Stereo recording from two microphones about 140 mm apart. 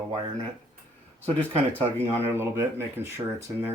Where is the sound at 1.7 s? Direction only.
20° right (ahead or behind).